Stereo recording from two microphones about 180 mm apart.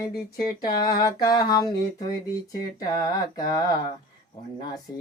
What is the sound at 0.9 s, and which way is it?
Mantra, 20° left (ahead or behind).